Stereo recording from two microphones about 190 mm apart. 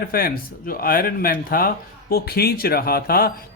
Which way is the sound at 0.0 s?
50° left (ahead or behind).